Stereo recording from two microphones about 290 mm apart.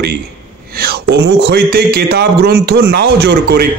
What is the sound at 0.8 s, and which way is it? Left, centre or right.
Speech, right.